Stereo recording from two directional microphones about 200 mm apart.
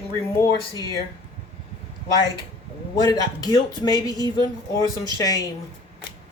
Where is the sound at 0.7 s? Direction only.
20° right (ahead or behind).